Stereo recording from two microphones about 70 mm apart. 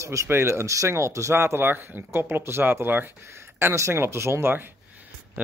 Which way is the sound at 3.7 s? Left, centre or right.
Right.